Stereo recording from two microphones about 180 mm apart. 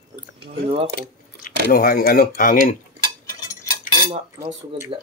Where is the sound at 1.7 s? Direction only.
55° left (ahead or behind).